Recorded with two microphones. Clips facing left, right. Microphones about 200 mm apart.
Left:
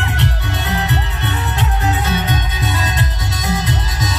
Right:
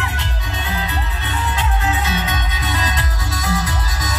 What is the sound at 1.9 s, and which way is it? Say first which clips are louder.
Music: left 3 dB; 40° left (ahead or behind).